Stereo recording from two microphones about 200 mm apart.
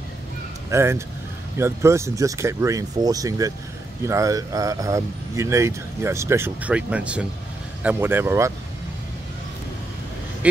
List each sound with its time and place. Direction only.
0.7 s speech: 15° right (ahead or behind)
10.4 s speech: 5° right (ahead or behind)